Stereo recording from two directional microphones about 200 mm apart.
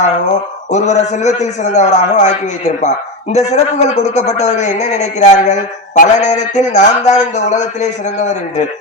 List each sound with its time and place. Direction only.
0.0 s speech: 35° left (ahead or behind)